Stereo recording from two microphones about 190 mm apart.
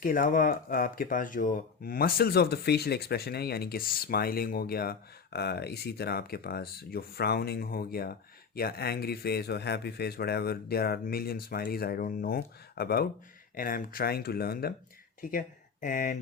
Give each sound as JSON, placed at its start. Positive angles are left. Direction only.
{"t": 0.0, "sound": "speech", "side_deg": 45}